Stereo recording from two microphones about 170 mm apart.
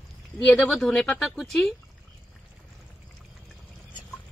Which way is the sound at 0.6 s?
Centre (ahead or behind).